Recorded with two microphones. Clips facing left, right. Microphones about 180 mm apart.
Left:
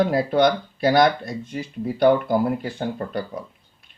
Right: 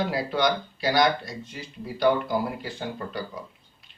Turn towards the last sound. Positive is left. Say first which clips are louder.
# left 6 dB
turn(degrees=50)  # may be behind; listen again after turning